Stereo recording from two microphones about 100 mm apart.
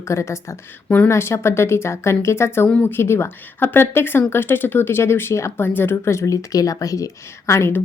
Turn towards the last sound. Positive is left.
turn(degrees=25)  # may be behind; listen again after turning